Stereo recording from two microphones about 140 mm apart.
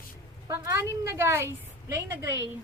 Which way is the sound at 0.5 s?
20° right (ahead or behind).